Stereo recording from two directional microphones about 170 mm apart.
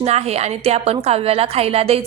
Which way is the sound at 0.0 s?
40° right (ahead or behind).